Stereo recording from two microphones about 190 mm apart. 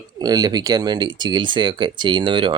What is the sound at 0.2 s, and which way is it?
Speech, 20° right (ahead or behind).